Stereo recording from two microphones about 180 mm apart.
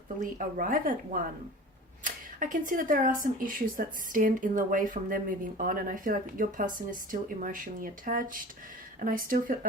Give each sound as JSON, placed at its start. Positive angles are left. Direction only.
{"t": 0.2, "sound": "speech", "side_deg": -50}